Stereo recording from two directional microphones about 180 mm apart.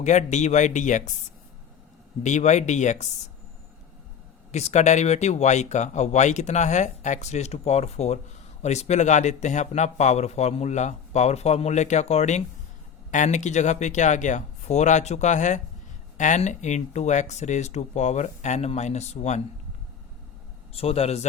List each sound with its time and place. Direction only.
0.0 s speech: 40° left (ahead or behind)
2.2 s speech: 40° left (ahead or behind)
4.5 s speech: 40° left (ahead or behind)
20.7 s speech: 35° left (ahead or behind)